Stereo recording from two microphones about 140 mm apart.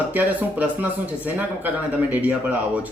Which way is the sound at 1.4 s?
10° right (ahead or behind).